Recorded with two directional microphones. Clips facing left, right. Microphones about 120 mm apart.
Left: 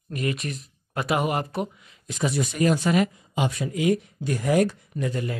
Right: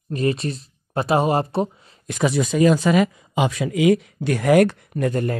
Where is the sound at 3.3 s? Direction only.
90° right.